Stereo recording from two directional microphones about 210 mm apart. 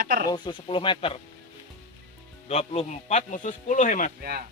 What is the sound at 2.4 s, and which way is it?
Speech, 30° left (ahead or behind).